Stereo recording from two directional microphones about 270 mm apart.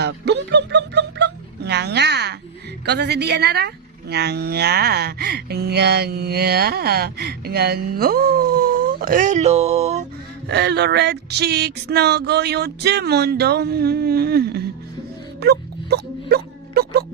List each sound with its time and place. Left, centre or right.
0.0 s music: right
2.8 s speech: right
10.5 s speech: right
15.4 s music: right